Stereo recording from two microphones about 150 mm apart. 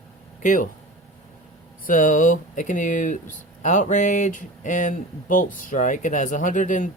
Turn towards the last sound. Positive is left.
turn(degrees=60)  # may be behind; listen again after turning